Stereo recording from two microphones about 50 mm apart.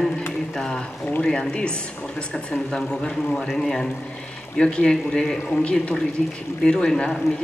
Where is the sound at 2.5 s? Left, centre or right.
Centre.